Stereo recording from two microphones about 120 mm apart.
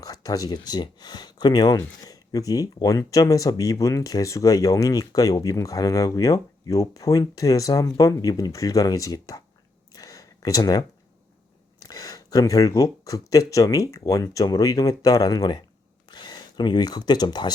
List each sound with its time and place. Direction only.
0.0 s speech: 30° left (ahead or behind)
9.9 s a sound: 30° left (ahead or behind)
11.8 s speech: 30° left (ahead or behind)